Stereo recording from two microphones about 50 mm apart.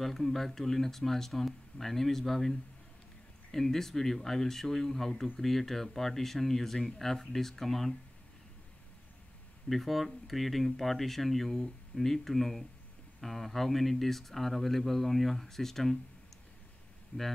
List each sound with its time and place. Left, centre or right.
0.0 s speech: centre
3.5 s speech: centre
9.7 s speech: centre
17.1 s speech: left